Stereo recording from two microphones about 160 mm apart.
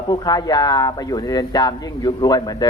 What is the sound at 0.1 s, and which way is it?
A man's voice, 25° left (ahead or behind).